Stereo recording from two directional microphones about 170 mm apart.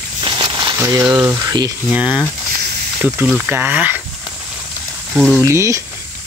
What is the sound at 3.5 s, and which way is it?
Speech, 10° right (ahead or behind).